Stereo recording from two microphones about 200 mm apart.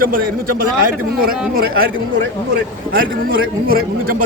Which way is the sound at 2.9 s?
45° right (ahead or behind).